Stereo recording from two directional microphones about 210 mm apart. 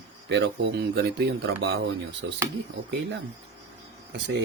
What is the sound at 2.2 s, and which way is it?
Speech, 65° right (ahead or behind).